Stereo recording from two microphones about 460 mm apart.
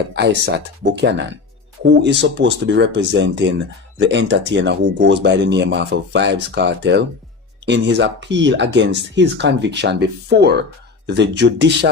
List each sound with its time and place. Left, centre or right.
0.1 s speech: right